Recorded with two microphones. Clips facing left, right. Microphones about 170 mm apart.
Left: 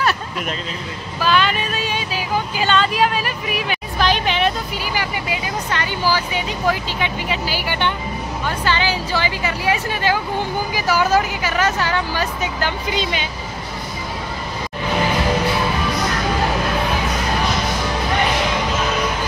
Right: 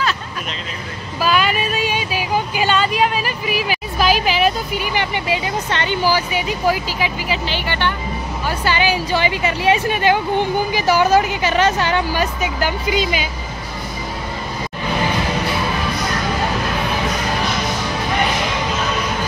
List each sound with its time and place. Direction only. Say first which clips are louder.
1.2 s vehicle: right 1 dB; 10° right (ahead or behind)
4.7 s speech: right 3 dB; 25° right (ahead or behind)
6.0 s speech: right 1 dB; 10° right (ahead or behind)
7.4 s speech: left 1 dB; 10° left (ahead or behind)
8.5 s speech: right 2 dB; 15° right (ahead or behind)